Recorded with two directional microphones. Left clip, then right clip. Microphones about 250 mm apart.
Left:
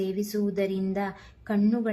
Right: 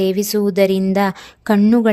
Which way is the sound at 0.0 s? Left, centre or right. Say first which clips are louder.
Right 12 dB; right.